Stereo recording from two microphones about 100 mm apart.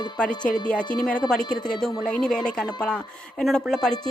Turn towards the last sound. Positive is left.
turn(degrees=5)  # may be behind; listen again after turning